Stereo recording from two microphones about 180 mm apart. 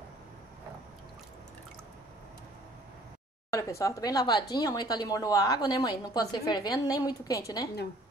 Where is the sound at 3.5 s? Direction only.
15° left (ahead or behind).